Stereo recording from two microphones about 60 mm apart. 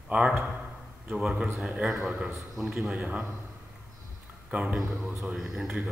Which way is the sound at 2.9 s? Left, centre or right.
Right.